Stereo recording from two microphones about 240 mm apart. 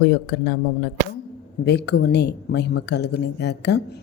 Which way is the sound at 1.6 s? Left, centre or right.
Left.